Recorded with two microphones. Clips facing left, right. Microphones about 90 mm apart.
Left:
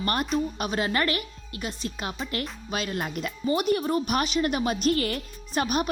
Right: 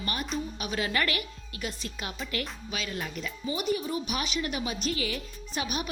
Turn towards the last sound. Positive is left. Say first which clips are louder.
# left 7 dB
turn(degrees=45)  # may be behind; listen again after turning